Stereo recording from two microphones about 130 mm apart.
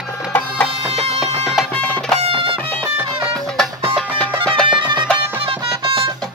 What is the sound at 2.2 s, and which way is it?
Music, 45° right (ahead or behind).